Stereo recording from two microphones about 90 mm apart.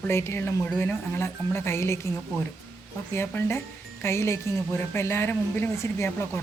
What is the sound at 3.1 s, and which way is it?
Speech, 25° left (ahead or behind).